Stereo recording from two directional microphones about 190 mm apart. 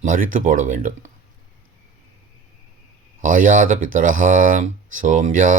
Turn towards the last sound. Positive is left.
turn(degrees=-45)  # may be behind; listen again after turning